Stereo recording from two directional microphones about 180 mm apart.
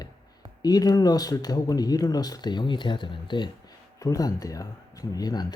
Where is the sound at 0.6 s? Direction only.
20° left (ahead or behind).